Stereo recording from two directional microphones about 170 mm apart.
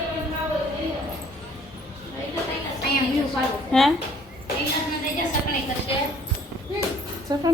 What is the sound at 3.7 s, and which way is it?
Speech, 5° left (ahead or behind).